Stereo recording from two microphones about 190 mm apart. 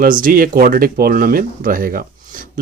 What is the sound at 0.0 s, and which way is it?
Speech, 45° right (ahead or behind).